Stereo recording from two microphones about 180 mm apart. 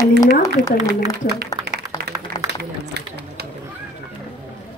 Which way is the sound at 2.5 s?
65° right (ahead or behind).